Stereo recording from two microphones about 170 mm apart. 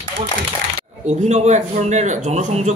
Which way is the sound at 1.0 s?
40° right (ahead or behind).